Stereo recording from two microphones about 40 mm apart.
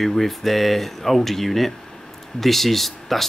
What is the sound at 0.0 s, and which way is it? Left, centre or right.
Speech, centre.